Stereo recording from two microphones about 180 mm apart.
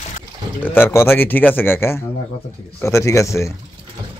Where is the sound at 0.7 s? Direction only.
15° left (ahead or behind).